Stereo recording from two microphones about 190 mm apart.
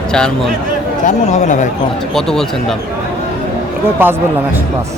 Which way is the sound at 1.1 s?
40° left (ahead or behind).